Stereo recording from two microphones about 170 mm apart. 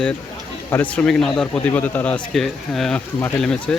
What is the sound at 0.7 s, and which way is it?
Speech, 10° left (ahead or behind).